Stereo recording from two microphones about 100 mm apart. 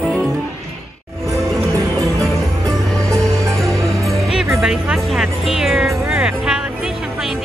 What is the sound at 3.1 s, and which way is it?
Music, 35° right (ahead or behind).